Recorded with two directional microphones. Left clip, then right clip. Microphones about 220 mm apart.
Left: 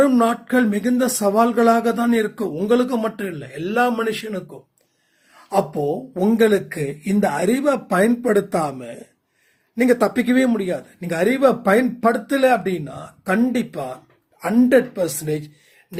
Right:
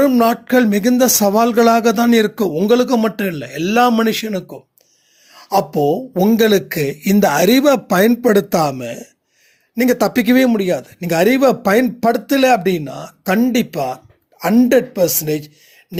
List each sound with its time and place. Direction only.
0.0 s speech: 30° right (ahead or behind)